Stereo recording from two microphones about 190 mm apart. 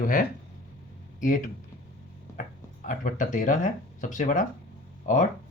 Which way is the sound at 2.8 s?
45° left (ahead or behind).